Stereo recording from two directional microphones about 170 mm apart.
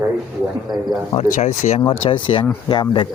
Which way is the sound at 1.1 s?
40° left (ahead or behind).